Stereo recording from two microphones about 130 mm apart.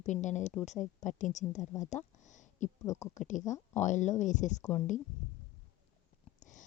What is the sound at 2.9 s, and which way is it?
Speech, 65° left (ahead or behind).